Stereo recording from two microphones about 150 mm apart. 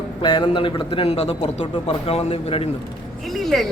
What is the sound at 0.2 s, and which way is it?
A man's voice, 30° left (ahead or behind).